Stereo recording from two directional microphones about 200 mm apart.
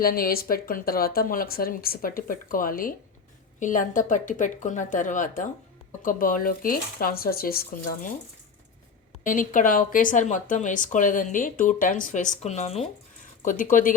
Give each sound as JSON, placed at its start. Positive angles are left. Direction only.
{"t": 0.0, "sound": "speech", "side_deg": 45}
{"t": 9.2, "sound": "speech", "side_deg": 40}